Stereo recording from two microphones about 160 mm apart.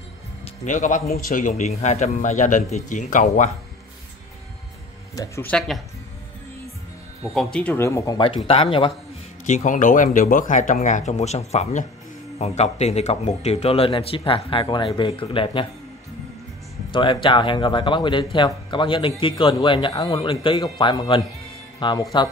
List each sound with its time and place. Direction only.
0.7 s speech: 50° left (ahead or behind)
1.1 s speech: 65° left (ahead or behind)
5.1 s speech: 20° left (ahead or behind)
5.5 s speech: centre (ahead or behind)
7.3 s speech: 5° left (ahead or behind)
8.5 s a man's voice: 35° left (ahead or behind)
9.5 s a man's voice: 50° left (ahead or behind); by 15.6 s 35° left (ahead or behind)
16.9 s a man's voice: 30° left (ahead or behind)